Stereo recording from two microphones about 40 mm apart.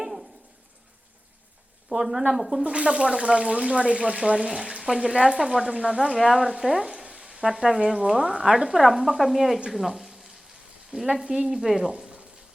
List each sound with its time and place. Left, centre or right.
0.0 s a sound: centre
1.9 s speech: right
2.3 s speech: centre
2.6 s speech: right
6.2 s frying: centre
7.4 s speech: centre
9.6 s frying: centre
10.9 s speech: centre
11.9 s frying: right